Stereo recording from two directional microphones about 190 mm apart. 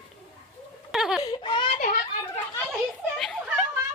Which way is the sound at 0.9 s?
Centre (ahead or behind).